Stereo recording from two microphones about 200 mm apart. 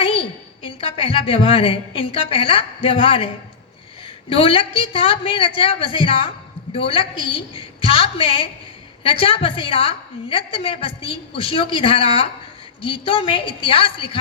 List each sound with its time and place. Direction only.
0.0 s a woman's voice: 25° left (ahead or behind)
4.3 s a woman's voice: 25° left (ahead or behind)